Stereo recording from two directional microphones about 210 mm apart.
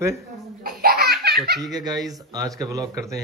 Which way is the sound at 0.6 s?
45° right (ahead or behind).